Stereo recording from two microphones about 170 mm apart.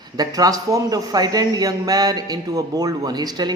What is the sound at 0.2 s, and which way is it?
Speech, 20° right (ahead or behind).